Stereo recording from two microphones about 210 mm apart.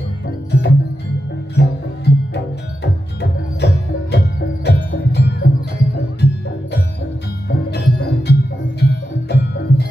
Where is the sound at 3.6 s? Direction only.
50° left (ahead or behind).